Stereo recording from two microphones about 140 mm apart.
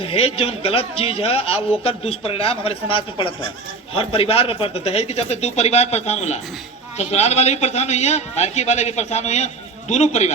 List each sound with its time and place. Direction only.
0.0 s a man's voice: 45° left (ahead or behind)